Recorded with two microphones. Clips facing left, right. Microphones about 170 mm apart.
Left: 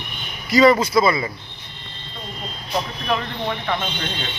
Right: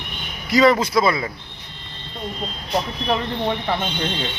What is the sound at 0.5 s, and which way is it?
Speech, 5° left (ahead or behind).